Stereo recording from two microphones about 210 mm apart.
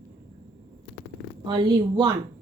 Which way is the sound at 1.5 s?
20° right (ahead or behind).